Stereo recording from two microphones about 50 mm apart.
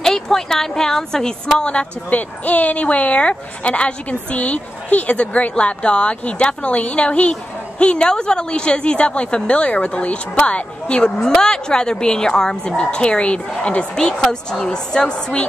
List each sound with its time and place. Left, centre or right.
0.0 s a woman's voice: centre